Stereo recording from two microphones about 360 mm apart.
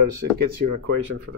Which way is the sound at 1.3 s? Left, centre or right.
Right.